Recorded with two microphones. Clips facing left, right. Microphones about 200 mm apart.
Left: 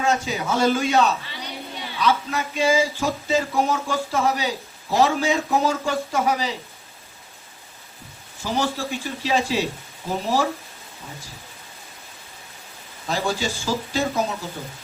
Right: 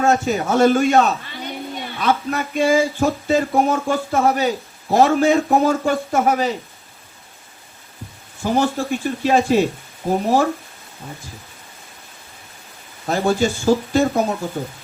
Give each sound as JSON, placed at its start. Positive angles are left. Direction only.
{"t": 0.0, "sound": "a man's voice", "side_deg": -50}
{"t": 8.4, "sound": "a man's voice", "side_deg": -50}
{"t": 13.1, "sound": "a man's voice", "side_deg": -50}